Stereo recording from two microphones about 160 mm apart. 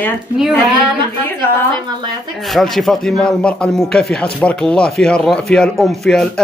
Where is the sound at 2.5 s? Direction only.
Centre (ahead or behind).